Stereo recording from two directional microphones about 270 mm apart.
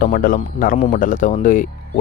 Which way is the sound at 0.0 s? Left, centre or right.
Left.